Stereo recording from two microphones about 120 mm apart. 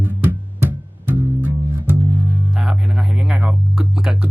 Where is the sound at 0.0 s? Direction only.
15° right (ahead or behind).